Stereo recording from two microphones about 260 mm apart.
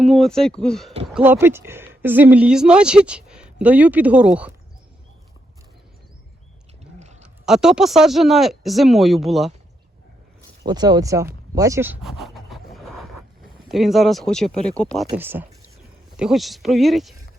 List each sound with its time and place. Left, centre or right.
0.0 s speech: centre
7.4 s speech: centre
10.7 s a sound: centre
13.7 s speech: centre